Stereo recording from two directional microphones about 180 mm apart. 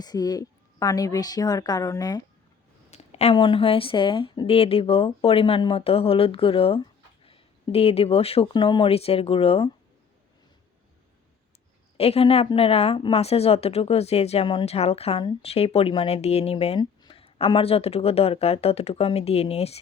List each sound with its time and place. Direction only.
0.0 s a woman's voice: 20° left (ahead or behind)
2.9 s a woman's voice: 35° left (ahead or behind)
11.9 s a woman's voice: 35° left (ahead or behind)